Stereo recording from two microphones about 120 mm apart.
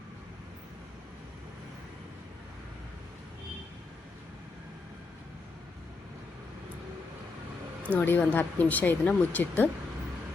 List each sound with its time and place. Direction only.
7.9 s speech: 15° left (ahead or behind)